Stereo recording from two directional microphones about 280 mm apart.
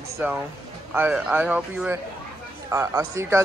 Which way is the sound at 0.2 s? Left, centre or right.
Centre.